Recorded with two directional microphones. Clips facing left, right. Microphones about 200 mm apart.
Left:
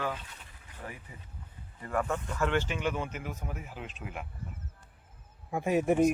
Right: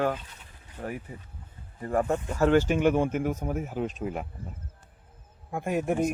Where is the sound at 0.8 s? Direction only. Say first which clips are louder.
Right 9 dB; 35° right (ahead or behind).